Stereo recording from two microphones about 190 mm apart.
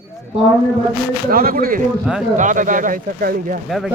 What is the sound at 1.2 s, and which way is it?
Speech, 50° right (ahead or behind).